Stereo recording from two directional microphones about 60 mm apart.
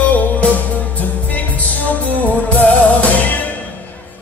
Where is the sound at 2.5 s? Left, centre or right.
Left.